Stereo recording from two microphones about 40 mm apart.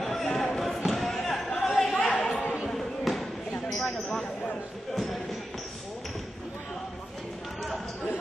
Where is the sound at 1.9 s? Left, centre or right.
Left.